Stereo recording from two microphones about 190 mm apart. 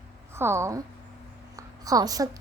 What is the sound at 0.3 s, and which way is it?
A child's voice, 15° right (ahead or behind).